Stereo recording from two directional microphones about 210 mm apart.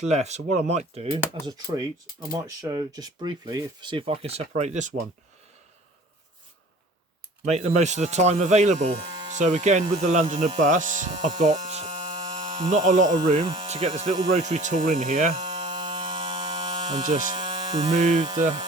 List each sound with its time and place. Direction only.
0.1 s speech: 30° right (ahead or behind)
0.9 s speech: 20° right (ahead or behind)
7.4 s speech: 30° right (ahead or behind)
11.6 s hum: 35° right (ahead or behind)
12.2 s electric toothbrush: 20° right (ahead or behind)
12.7 s speech: 35° right (ahead or behind)
13.1 s speech: 20° right (ahead or behind); by 15.4 s 35° right (ahead or behind)
15.6 s electric shaver: 20° right (ahead or behind)
17.0 s speech: 35° right (ahead or behind)
17.3 s a sound: 20° right (ahead or behind)
17.9 s speech: 35° right (ahead or behind)